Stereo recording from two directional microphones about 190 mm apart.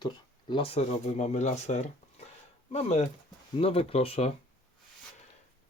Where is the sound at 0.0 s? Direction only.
25° left (ahead or behind).